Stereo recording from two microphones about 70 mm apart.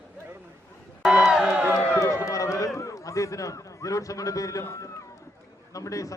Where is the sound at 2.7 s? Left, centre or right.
Left.